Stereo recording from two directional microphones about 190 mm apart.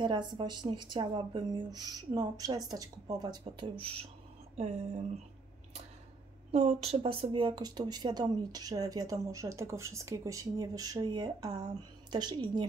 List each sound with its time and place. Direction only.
0.0 s speech: 25° right (ahead or behind)
6.5 s speech: 35° right (ahead or behind)